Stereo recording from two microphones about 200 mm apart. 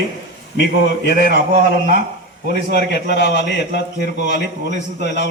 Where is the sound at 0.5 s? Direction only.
55° left (ahead or behind).